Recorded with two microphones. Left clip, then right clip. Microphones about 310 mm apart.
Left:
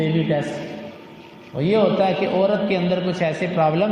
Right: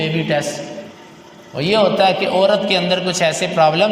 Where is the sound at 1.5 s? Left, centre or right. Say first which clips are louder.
Right 4 dB; right.